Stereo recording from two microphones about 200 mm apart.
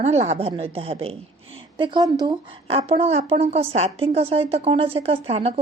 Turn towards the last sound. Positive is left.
turn(degrees=-30)  # may be behind; listen again after turning